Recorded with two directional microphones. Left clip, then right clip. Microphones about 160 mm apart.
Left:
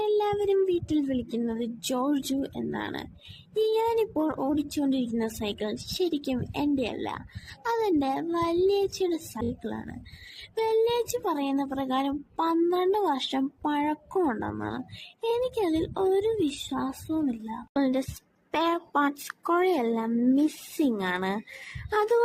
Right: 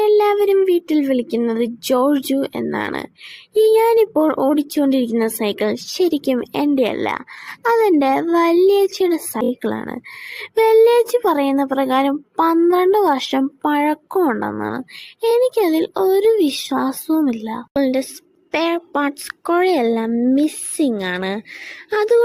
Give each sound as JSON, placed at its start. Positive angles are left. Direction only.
{"t": 0.0, "sound": "child singing", "side_deg": -30}
{"t": 3.5, "sound": "speech", "side_deg": -30}